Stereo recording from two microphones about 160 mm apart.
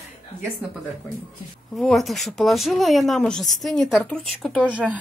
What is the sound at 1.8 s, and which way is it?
A woman's voice, centre (ahead or behind).